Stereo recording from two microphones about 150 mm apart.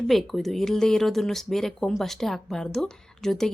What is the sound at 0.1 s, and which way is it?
Speech, centre (ahead or behind).